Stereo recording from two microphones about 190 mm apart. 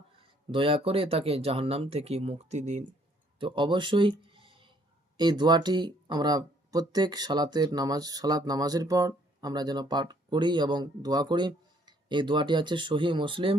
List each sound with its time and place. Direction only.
0.2 s speech: 25° right (ahead or behind)
3.4 s speech: 25° right (ahead or behind)